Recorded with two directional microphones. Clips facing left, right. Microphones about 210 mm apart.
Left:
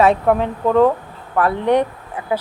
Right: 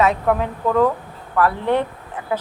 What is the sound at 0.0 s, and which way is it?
Speech, 30° left (ahead or behind).